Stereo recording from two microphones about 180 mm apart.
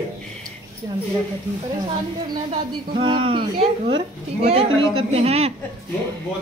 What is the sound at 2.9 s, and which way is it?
A woman's voice, 30° right (ahead or behind).